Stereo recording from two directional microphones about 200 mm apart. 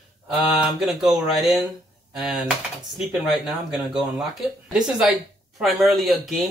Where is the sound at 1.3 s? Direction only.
Centre (ahead or behind).